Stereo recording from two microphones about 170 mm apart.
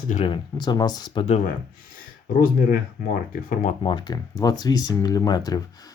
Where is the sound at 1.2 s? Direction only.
40° left (ahead or behind).